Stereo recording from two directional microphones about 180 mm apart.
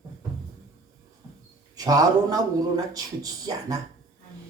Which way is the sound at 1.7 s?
20° right (ahead or behind).